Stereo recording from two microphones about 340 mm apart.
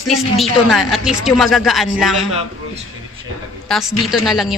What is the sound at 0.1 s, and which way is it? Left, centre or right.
A woman's voice, centre.